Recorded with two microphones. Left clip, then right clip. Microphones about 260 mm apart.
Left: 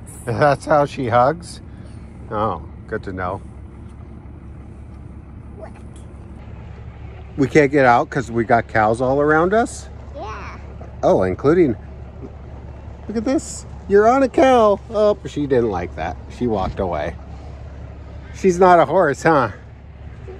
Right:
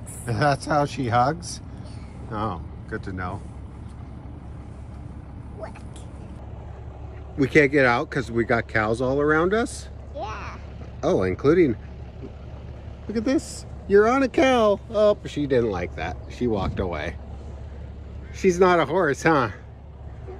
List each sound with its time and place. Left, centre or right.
0.2 s speech: centre
7.3 s speech: centre
10.1 s a sound: centre
11.0 s speech: centre
13.1 s speech: centre
18.4 s speech: centre